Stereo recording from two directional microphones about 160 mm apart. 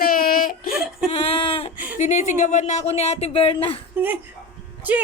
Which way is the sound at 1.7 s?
10° right (ahead or behind).